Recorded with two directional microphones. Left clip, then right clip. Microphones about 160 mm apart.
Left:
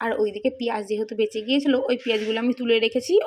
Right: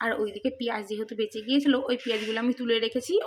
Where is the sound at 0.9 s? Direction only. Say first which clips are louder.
Left 6 dB; 5° left (ahead or behind).